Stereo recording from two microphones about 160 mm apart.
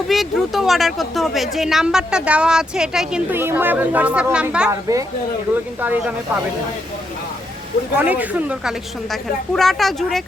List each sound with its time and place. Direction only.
0.1 s speech: centre (ahead or behind)
4.7 s speech: 20° right (ahead or behind)
7.9 s speech: 10° right (ahead or behind)